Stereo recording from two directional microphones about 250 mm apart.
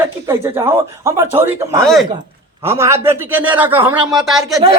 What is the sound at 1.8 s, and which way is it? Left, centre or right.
Speech, centre.